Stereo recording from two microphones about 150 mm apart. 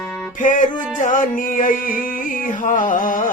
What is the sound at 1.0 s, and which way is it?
Music, 60° left (ahead or behind).